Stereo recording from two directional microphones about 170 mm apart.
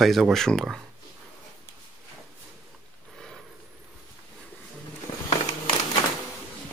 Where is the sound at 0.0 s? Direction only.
Centre (ahead or behind).